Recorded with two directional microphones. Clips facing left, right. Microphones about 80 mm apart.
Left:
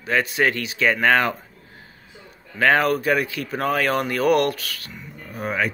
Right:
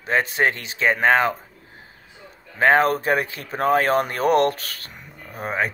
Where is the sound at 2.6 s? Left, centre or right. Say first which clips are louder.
Right 1 dB; right.